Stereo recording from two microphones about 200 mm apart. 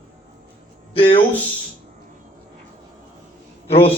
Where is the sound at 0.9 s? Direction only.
30° left (ahead or behind).